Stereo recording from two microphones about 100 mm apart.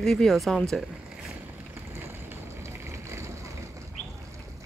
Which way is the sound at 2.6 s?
30° right (ahead or behind).